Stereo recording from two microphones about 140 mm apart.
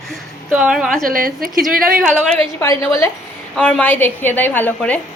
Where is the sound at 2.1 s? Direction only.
5° left (ahead or behind).